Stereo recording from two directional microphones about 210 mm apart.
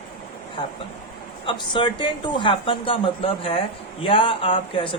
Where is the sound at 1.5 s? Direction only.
20° left (ahead or behind).